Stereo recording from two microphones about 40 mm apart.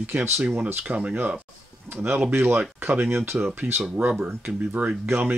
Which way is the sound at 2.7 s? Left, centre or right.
Right.